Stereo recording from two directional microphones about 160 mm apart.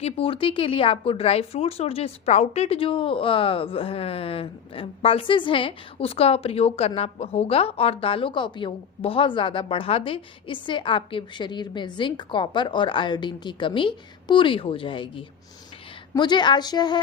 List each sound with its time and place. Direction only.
0.0 s a woman's voice: 35° left (ahead or behind)